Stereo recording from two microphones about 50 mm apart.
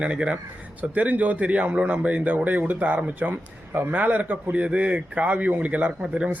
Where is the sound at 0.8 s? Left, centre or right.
Right.